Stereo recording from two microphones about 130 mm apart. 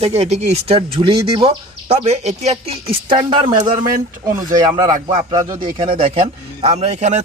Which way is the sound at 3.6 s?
40° right (ahead or behind).